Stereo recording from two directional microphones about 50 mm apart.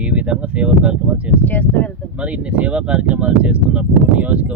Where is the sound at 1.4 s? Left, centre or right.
Left.